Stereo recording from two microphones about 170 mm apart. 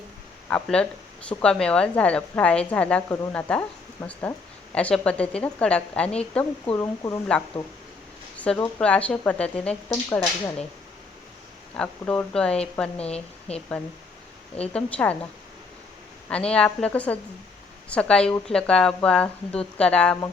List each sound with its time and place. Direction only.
0.5 s a woman's voice: 5° left (ahead or behind)
6.7 s speech: 20° left (ahead or behind)
8.4 s a woman's voice: 10° left (ahead or behind)
9.9 s a woman's voice: 15° left (ahead or behind)
11.8 s speech: 5° left (ahead or behind)
13.1 s a woman's voice: 35° left (ahead or behind)
14.7 s a woman's voice: 5° left (ahead or behind)
16.3 s a woman's voice: 5° left (ahead or behind)